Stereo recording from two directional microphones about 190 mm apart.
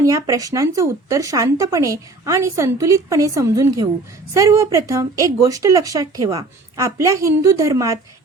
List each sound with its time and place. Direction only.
0.0 s speech: 15° right (ahead or behind)